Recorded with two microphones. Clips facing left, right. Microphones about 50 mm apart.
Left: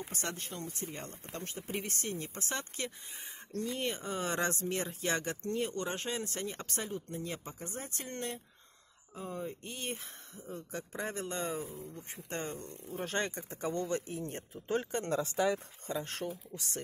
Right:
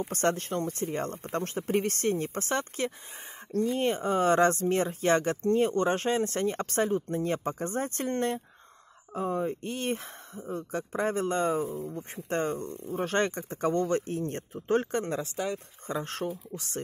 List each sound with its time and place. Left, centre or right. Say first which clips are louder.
0.1 s speech: right 12 dB; right
15.2 s speech: left 2 dB; centre
15.9 s speech: right 5 dB; right